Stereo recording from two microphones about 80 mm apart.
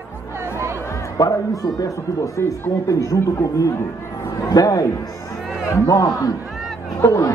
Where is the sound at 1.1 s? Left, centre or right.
Left.